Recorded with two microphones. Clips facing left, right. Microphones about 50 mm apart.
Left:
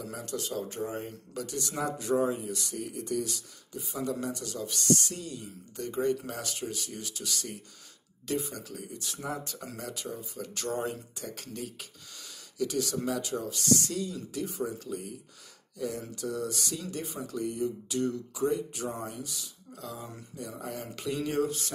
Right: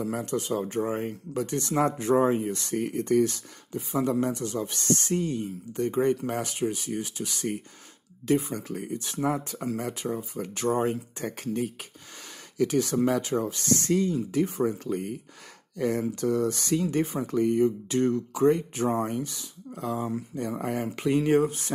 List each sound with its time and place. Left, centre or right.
0.0 s speech: right
2.2 s speech: right
10.8 s speech: right
12.9 s speech: right
13.2 s speech: right
15.8 s speech: right
18.9 s speech: right
19.2 s speech: right
20.3 s speech: right
20.7 s speech: right